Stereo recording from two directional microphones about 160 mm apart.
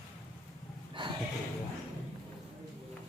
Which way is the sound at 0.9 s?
30° right (ahead or behind).